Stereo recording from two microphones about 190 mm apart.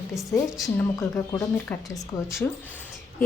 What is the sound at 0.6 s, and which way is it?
A woman's voice, 15° left (ahead or behind).